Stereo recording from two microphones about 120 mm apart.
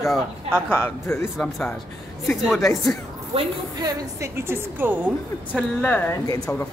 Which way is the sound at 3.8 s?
35° right (ahead or behind).